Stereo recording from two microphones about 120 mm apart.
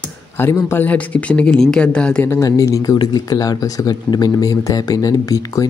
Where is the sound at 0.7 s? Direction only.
15° left (ahead or behind).